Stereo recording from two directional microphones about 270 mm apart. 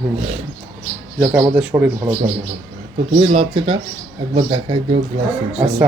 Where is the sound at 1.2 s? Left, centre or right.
Centre.